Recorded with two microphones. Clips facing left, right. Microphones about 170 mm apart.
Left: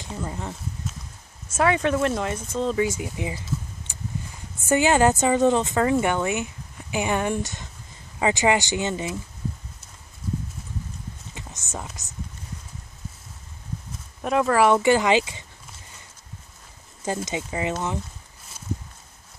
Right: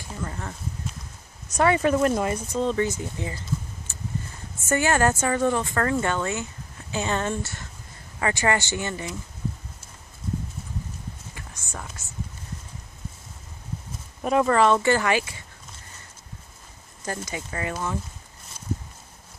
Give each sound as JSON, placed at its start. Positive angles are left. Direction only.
{"t": 0.0, "sound": "speech", "side_deg": 15}
{"t": 1.5, "sound": "speech", "side_deg": 0}
{"t": 3.9, "sound": "a sound", "side_deg": 15}
{"t": 4.6, "sound": "speech", "side_deg": 15}
{"t": 11.3, "sound": "a sound", "side_deg": 20}
{"t": 14.2, "sound": "speech", "side_deg": 0}
{"t": 14.6, "sound": "speech", "side_deg": 15}
{"t": 17.0, "sound": "speech", "side_deg": 20}